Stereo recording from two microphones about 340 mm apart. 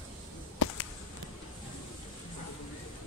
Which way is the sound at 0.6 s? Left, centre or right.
Left.